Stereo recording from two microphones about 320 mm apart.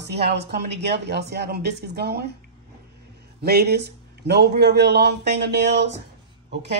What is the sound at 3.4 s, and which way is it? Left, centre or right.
A man's voice, right.